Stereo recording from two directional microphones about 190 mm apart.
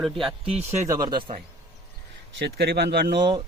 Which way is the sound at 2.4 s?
60° right (ahead or behind).